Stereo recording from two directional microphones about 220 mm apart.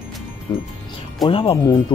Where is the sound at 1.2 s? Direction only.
25° left (ahead or behind).